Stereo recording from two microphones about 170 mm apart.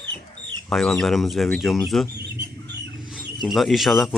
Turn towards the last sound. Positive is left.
turn(degrees=0)  # may be behind; listen again after turning